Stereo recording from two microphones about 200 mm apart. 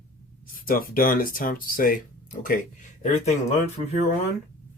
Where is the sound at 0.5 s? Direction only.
45° left (ahead or behind).